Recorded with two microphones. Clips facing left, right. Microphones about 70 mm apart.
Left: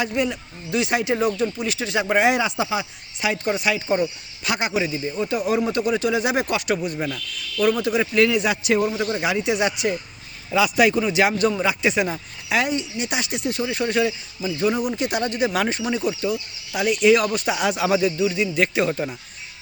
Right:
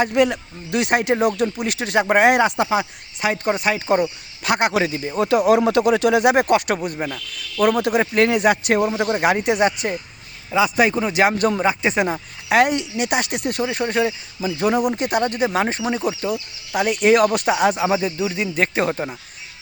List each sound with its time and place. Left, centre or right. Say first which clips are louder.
0.1 s speech: right 6 dB; right
4.7 s speech: right 3 dB; right
7.0 s speech: right 1 dB; right
7.6 s speech: right 3 dB; right
11.1 s speech: right 2 dB; right
12.5 s speech: right 6 dB; right
14.6 s speech: right 3 dB; right
17.7 s speech: even; right
18.3 s speech: even; right